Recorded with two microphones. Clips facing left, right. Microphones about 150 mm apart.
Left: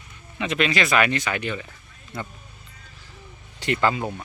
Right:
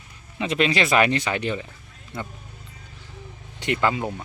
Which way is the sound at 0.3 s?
30° right (ahead or behind).